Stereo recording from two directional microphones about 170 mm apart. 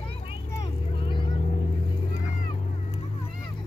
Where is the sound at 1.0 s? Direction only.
30° left (ahead or behind).